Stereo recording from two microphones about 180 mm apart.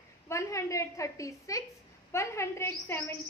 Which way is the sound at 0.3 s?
15° left (ahead or behind).